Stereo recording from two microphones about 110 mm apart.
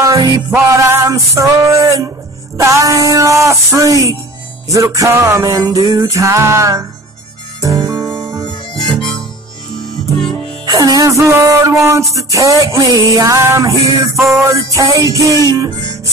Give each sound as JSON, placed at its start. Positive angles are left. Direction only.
{"t": 0.0, "sound": "music", "side_deg": -30}
{"t": 10.6, "sound": "music", "side_deg": -35}
{"t": 14.1, "sound": "music", "side_deg": 0}
{"t": 14.4, "sound": "music", "side_deg": -30}